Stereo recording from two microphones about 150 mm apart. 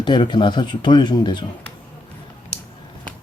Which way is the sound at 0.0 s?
30° left (ahead or behind).